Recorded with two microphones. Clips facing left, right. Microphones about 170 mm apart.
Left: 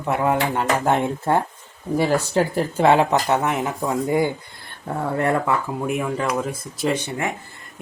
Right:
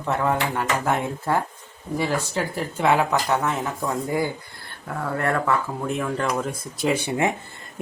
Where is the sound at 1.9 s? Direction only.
50° left (ahead or behind).